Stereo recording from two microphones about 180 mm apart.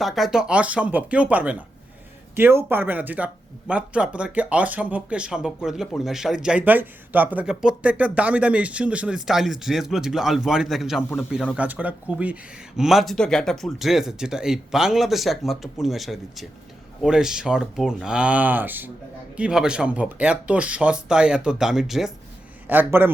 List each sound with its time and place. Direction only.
0.0 s speech: centre (ahead or behind)